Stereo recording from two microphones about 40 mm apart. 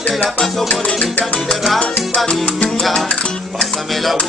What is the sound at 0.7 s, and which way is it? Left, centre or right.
Music, left.